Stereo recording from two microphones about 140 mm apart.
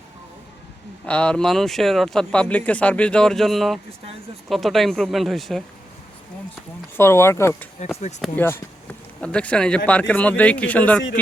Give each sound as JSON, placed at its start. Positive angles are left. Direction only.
{"t": 1.0, "sound": "speech", "side_deg": 10}
{"t": 6.9, "sound": "a man's voice", "side_deg": 20}
{"t": 8.2, "sound": "a man's voice", "side_deg": 0}